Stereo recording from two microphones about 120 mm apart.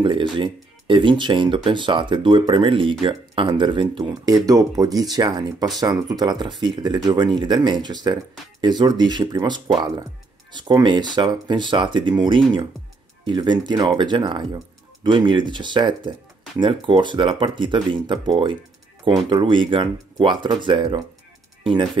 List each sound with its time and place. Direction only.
0.0 s speech: 45° right (ahead or behind)
4.5 s speech: 30° right (ahead or behind)